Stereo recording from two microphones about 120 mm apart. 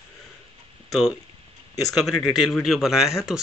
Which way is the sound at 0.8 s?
Centre (ahead or behind).